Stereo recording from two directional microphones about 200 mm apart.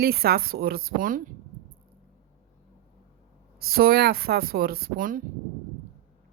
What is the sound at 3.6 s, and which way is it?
A woman's voice, 50° right (ahead or behind).